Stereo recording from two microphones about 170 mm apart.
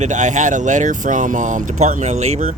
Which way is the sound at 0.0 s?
45° right (ahead or behind).